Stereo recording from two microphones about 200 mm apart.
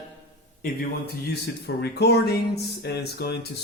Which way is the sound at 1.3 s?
55° left (ahead or behind).